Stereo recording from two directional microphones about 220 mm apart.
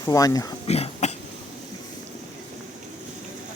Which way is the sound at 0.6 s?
30° left (ahead or behind).